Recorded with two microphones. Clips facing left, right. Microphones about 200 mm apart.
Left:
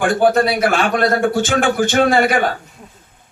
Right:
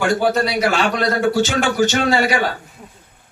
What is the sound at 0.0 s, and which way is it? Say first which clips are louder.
A man's voice: left 3 dB; 50° left (ahead or behind).